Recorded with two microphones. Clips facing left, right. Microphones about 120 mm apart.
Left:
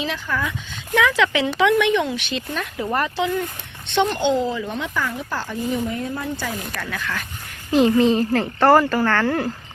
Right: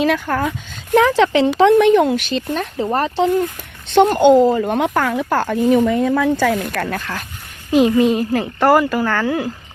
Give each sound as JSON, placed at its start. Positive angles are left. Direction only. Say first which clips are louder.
{"t": 0.0, "sound": "speech", "louder": "right 8 dB", "side_deg": -55}
{"t": 3.8, "sound": "speech", "louder": "right 8 dB", "side_deg": -45}
{"t": 6.3, "sound": "speech", "louder": "right 11 dB", "side_deg": -65}
{"t": 6.9, "sound": "speech", "louder": "right 3 dB", "side_deg": -35}
{"t": 7.7, "sound": "speech", "louder": "right 2 dB", "side_deg": -15}